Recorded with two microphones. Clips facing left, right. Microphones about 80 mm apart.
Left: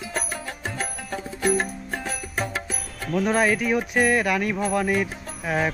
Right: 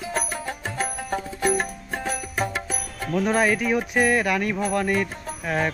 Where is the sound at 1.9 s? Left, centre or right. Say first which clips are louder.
Right 3 dB; centre.